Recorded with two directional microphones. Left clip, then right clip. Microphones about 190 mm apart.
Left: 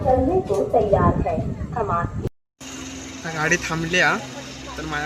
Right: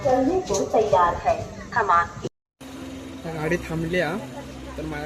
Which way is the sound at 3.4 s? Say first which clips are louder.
Left 5 dB; centre (ahead or behind).